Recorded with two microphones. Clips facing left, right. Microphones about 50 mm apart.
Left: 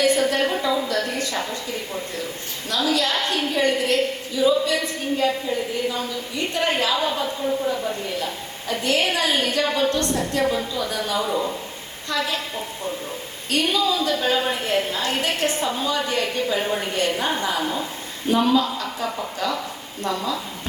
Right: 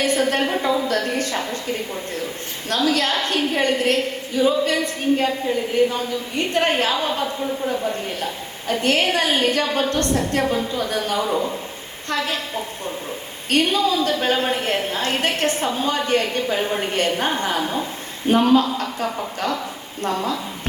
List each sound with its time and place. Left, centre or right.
0.0 s a sound: right
2.6 s a woman's voice: right
13.5 s a woman's voice: right